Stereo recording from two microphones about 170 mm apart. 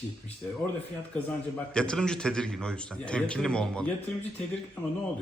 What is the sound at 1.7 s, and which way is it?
A man's voice, 5° left (ahead or behind).